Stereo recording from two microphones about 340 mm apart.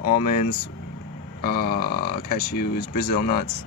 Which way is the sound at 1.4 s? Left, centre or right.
Left.